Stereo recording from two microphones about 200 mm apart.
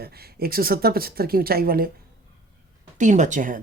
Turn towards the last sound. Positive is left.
turn(degrees=-40)  # may be behind; listen again after turning